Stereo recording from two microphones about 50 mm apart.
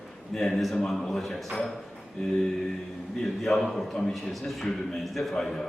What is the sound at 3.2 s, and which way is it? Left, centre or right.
A man's voice, centre.